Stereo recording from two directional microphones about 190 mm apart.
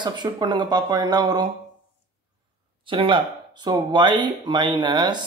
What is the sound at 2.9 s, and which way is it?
A man's voice, 25° right (ahead or behind).